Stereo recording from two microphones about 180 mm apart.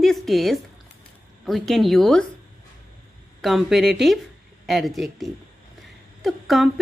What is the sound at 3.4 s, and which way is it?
A woman's voice, centre (ahead or behind).